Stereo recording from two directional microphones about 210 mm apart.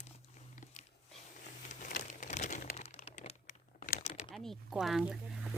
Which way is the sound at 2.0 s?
35° left (ahead or behind).